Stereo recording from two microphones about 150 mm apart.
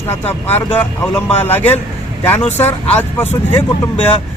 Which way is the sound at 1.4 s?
15° left (ahead or behind).